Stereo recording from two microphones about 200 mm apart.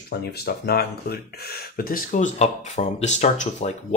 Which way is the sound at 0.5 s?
55° left (ahead or behind).